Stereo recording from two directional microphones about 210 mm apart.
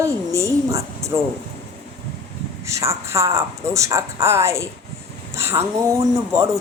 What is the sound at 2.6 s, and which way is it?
Speech, 15° right (ahead or behind).